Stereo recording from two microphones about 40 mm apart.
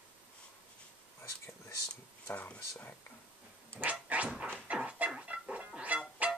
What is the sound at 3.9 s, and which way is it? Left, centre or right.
Dog, right.